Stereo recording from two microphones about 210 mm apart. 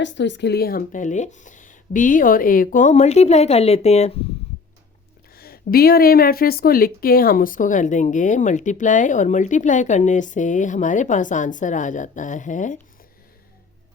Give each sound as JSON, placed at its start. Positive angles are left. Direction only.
{"t": 0.0, "sound": "a woman's voice", "side_deg": 60}
{"t": 5.3, "sound": "a woman's voice", "side_deg": 45}